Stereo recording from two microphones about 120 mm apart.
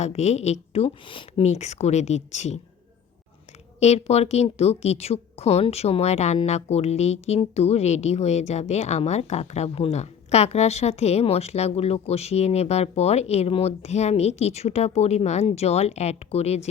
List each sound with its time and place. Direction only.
0.0 s speech: 65° left (ahead or behind)
1.5 s speech: 65° left (ahead or behind)
3.8 s speech: 65° left (ahead or behind)